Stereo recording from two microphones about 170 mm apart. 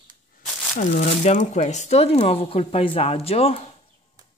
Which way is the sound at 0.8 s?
45° left (ahead or behind).